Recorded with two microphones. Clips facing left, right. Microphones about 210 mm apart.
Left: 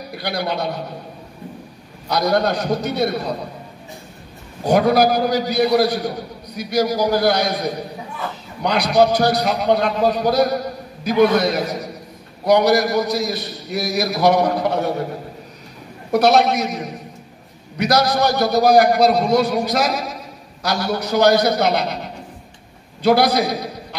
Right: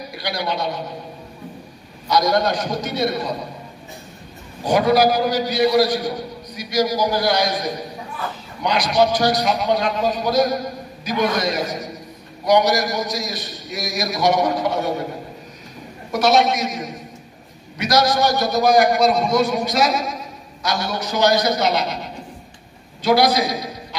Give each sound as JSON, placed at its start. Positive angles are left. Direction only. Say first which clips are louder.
{"t": 0.1, "sound": "a man's voice", "louder": "left 2 dB", "side_deg": 60}
{"t": 2.0, "sound": "a man's voice", "louder": "even", "side_deg": 60}
{"t": 4.6, "sound": "a man's voice", "louder": "left 1 dB", "side_deg": 60}
{"t": 16.1, "sound": "a man's voice", "louder": "left 2 dB", "side_deg": 60}
{"t": 18.3, "sound": "a man's voice", "louder": "left 5 dB", "side_deg": 60}
{"t": 23.0, "sound": "a man's voice", "louder": "left 1 dB", "side_deg": 60}